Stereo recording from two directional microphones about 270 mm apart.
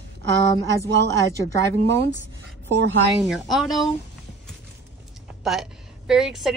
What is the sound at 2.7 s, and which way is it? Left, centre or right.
Speech, right.